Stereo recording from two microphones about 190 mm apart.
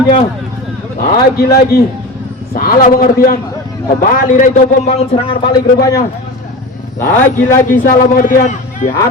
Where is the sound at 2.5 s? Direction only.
50° left (ahead or behind); by 5.3 s 35° left (ahead or behind).